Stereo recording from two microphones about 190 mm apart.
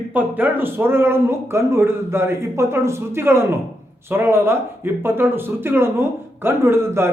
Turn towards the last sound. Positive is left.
turn(degrees=-15)  # may be behind; listen again after turning